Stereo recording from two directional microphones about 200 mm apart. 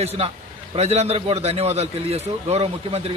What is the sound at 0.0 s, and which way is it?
A man's voice, 30° right (ahead or behind).